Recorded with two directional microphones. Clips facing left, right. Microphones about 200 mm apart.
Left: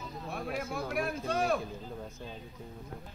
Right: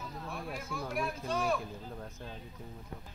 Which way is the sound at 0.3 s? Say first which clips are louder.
Left 6 dB; 65° left (ahead or behind).